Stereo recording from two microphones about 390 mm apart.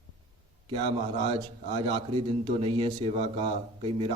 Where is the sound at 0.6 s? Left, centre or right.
Centre.